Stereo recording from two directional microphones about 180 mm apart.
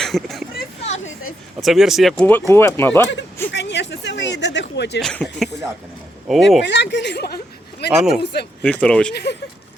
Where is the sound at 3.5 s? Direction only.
75° left (ahead or behind).